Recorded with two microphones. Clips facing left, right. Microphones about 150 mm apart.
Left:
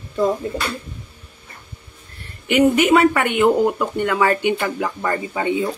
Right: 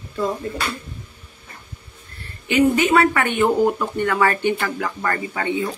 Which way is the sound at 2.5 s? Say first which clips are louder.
Left 2 dB; 15° left (ahead or behind).